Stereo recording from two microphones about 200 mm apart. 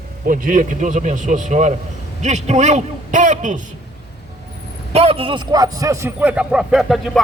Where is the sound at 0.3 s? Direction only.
45° right (ahead or behind).